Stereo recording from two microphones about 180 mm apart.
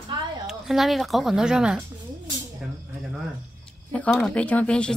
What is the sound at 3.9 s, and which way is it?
Speech, 5° left (ahead or behind).